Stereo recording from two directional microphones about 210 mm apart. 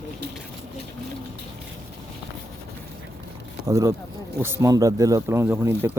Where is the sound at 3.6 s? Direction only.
15° right (ahead or behind).